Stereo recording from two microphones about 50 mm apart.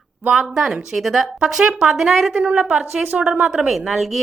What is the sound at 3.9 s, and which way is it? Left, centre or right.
Speech, centre.